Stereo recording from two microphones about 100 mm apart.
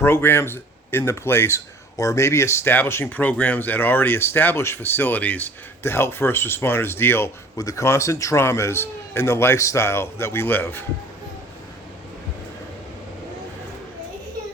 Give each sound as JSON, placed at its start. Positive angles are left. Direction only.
{"t": 0.0, "sound": "speech", "side_deg": 20}